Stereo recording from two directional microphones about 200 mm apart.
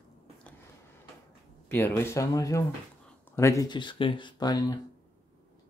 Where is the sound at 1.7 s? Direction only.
10° left (ahead or behind).